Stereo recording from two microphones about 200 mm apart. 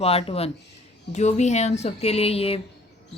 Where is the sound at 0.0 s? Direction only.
30° left (ahead or behind).